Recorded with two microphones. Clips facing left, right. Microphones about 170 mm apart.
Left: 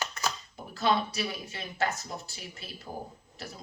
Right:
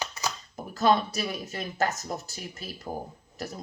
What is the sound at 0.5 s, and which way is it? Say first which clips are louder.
Speech: right 5 dB; 45° right (ahead or behind).